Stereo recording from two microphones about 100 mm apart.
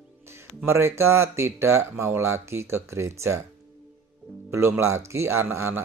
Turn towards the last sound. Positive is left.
turn(degrees=-25)  # may be behind; listen again after turning